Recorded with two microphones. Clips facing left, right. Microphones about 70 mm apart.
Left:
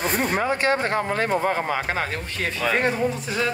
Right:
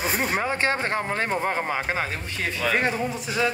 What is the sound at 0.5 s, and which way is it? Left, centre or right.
Speech, right.